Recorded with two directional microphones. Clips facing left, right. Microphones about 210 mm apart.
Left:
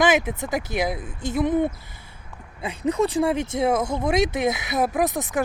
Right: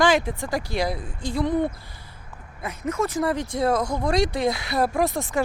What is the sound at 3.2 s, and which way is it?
Speech, 25° left (ahead or behind).